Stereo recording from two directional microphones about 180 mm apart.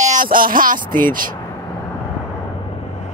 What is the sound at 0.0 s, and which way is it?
Speech, 45° right (ahead or behind).